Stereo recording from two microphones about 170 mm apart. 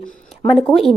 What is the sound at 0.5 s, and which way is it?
Speech, centre (ahead or behind).